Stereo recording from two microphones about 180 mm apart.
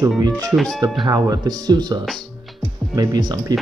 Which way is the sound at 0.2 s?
20° right (ahead or behind).